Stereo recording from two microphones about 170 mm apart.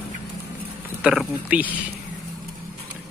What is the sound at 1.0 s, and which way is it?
Speech, 5° right (ahead or behind).